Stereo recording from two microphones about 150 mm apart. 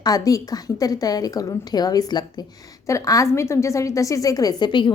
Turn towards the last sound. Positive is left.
turn(degrees=30)  # may be behind; listen again after turning